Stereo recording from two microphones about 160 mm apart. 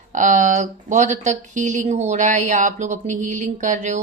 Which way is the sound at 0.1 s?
50° right (ahead or behind).